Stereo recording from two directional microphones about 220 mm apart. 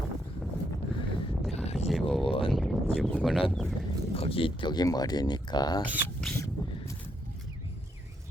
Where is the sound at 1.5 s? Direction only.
30° left (ahead or behind).